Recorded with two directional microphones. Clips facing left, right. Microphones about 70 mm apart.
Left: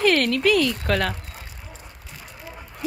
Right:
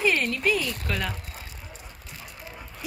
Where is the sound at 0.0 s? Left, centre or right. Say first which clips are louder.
Left 5 dB; left.